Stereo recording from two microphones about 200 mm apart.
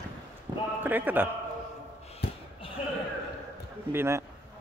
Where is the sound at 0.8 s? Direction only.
10° right (ahead or behind).